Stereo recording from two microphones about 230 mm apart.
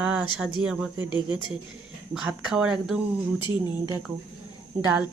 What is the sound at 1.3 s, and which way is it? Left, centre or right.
Speech, left.